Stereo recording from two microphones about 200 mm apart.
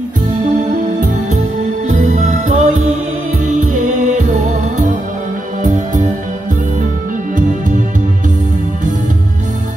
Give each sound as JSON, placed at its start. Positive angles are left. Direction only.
{"t": 1.9, "sound": "music", "side_deg": -40}
{"t": 3.7, "sound": "music", "side_deg": -40}